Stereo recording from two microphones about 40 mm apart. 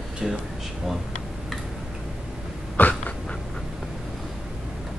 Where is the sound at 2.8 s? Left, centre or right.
Left.